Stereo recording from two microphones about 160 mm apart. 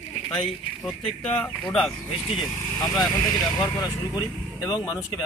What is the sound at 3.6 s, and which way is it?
Speech, 25° left (ahead or behind).